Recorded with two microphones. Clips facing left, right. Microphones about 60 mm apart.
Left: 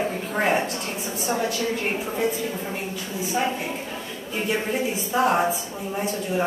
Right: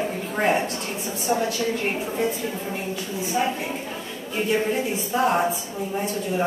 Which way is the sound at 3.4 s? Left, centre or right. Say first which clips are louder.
Right 1 dB; centre.